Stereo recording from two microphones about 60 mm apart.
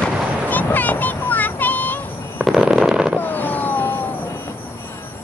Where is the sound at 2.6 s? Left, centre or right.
Centre.